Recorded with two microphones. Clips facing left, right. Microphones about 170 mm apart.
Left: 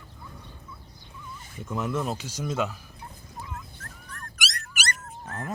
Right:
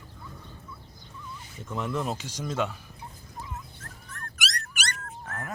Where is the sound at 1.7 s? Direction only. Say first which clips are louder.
Left 1 dB; 5° left (ahead or behind).